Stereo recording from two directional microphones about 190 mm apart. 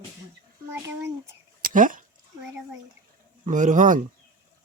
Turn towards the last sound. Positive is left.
turn(degrees=-45)  # may be behind; listen again after turning